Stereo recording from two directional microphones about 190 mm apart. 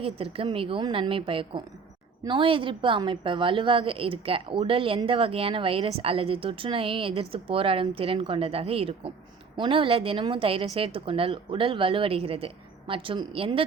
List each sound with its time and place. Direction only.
0.0 s a woman's voice: 30° right (ahead or behind)